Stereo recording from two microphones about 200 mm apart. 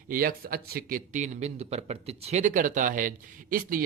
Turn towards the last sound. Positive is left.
turn(degrees=-45)  # may be behind; listen again after turning